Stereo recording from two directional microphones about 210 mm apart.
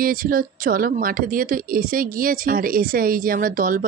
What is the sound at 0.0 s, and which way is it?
Speech, 40° right (ahead or behind).